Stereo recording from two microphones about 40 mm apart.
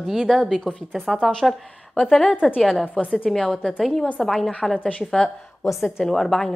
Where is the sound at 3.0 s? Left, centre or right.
Left.